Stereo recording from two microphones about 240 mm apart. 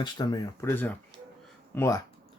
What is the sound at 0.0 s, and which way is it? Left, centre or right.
Speech, centre.